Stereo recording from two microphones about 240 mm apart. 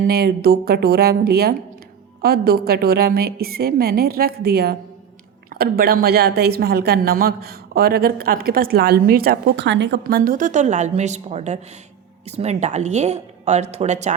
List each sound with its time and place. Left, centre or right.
0.1 s a woman's voice: right